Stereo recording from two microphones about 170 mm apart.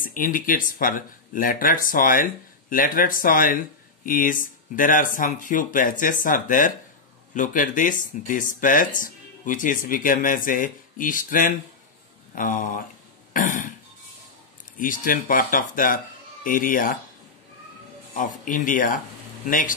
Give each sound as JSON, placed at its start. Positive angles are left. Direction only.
{"t": 0.0, "sound": "speech", "side_deg": 55}
{"t": 13.3, "sound": "cough", "side_deg": 55}
{"t": 14.8, "sound": "speech", "side_deg": 55}
{"t": 18.1, "sound": "speech", "side_deg": 50}